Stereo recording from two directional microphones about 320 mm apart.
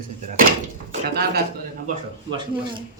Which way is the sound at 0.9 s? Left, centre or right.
Right.